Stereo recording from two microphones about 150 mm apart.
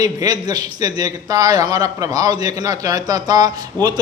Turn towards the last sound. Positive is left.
turn(degrees=-25)  # may be behind; listen again after turning